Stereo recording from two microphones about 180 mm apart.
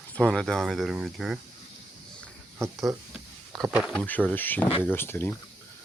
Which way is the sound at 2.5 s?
15° right (ahead or behind).